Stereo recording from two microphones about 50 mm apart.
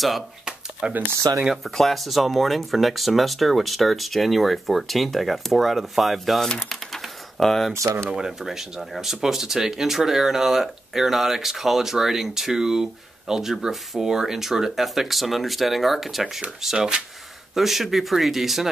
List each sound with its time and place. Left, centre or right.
0.8 s speech: right
1.5 s speech: centre
6.7 s typing: centre
7.7 s speech: right
8.3 s speech: centre